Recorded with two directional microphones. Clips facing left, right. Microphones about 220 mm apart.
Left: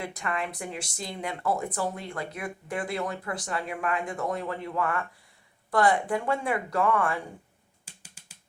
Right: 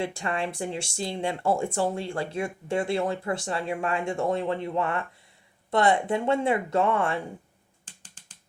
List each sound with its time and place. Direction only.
0.0 s speech: 30° right (ahead or behind)
7.9 s finger snapping: 10° left (ahead or behind)